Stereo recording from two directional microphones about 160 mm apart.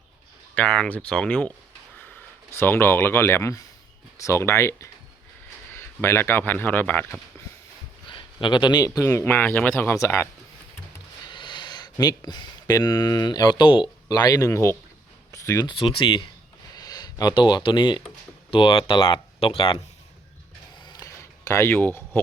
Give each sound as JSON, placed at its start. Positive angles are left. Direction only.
{"t": 0.5, "sound": "a man's voice", "side_deg": 10}
{"t": 8.0, "sound": "a man's voice", "side_deg": 30}
{"t": 11.3, "sound": "speech", "side_deg": 30}
{"t": 20.8, "sound": "a sound", "side_deg": 25}